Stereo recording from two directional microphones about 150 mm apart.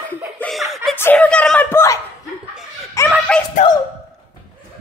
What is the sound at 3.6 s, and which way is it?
Speech, 55° left (ahead or behind).